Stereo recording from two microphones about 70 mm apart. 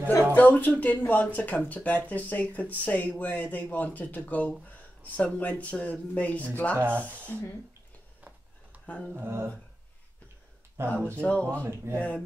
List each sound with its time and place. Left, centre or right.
0.3 s speech: left
6.8 s speech: right
9.1 s speech: right
10.8 s speech: right
11.1 s speech: centre
11.5 s speech: right